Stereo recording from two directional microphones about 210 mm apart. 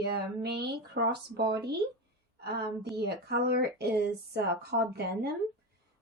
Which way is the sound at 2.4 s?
50° right (ahead or behind).